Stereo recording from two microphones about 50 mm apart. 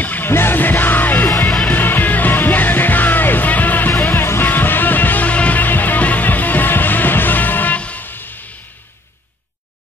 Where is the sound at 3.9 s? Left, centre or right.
Left.